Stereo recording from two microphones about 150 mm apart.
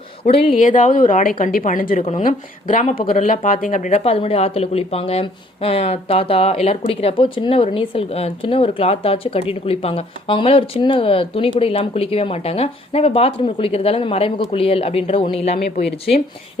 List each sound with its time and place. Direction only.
0.3 s speech: 40° left (ahead or behind)
0.6 s a woman's voice: 60° left (ahead or behind)
2.0 s speech: 45° left (ahead or behind)
2.2 s a woman's voice: 60° left (ahead or behind); by 16.1 s 40° left (ahead or behind)